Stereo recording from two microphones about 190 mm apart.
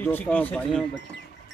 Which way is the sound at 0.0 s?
10° left (ahead or behind).